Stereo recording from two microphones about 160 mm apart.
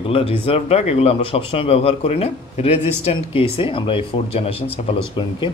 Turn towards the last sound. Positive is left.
turn(degrees=30)  # may be behind; listen again after turning